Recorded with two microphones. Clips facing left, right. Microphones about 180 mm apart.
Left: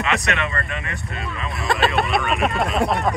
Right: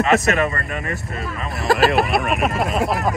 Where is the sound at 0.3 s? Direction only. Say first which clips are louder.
Right 5 dB; 40° right (ahead or behind).